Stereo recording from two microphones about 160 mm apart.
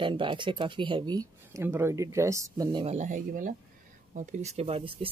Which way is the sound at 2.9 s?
50° right (ahead or behind).